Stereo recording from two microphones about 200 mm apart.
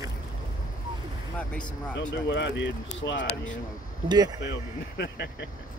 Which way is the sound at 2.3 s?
60° left (ahead or behind).